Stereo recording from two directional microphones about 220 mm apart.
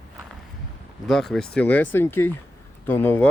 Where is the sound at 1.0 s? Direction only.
Centre (ahead or behind).